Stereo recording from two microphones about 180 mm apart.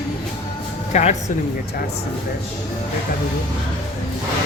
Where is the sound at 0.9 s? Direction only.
40° left (ahead or behind).